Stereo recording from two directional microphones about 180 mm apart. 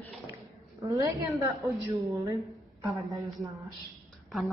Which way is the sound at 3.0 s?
Centre (ahead or behind).